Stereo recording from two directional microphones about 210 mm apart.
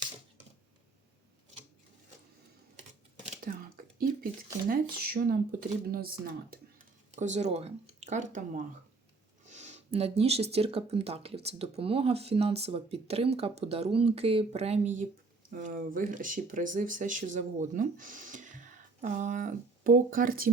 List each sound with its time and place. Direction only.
3.2 s a sound: 45° right (ahead or behind)
4.7 s speech: 45° right (ahead or behind)
7.2 s speech: 35° right (ahead or behind)